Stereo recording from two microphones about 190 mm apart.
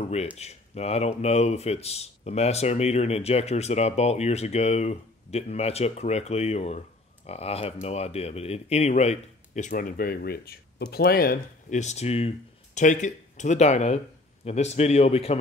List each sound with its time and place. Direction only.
0.0 s a sound: 35° left (ahead or behind)
0.4 s speech: 35° left (ahead or behind); by 11.8 s 50° left (ahead or behind)
11.8 s speech: 35° left (ahead or behind)